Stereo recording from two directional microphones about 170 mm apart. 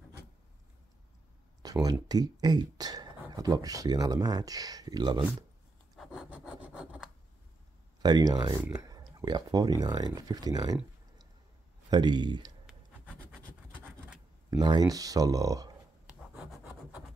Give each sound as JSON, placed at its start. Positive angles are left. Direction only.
{"t": 1.6, "sound": "speech", "side_deg": -20}
{"t": 5.9, "sound": "a sound", "side_deg": -5}
{"t": 8.0, "sound": "speech", "side_deg": -25}
{"t": 11.9, "sound": "speech", "side_deg": -25}
{"t": 12.6, "sound": "scratch", "side_deg": -5}
{"t": 14.5, "sound": "speech", "side_deg": -25}